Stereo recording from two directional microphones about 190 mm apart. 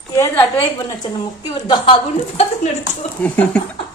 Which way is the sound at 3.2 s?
5° left (ahead or behind).